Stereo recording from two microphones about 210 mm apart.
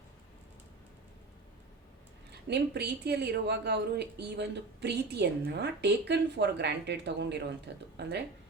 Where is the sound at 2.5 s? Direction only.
50° right (ahead or behind).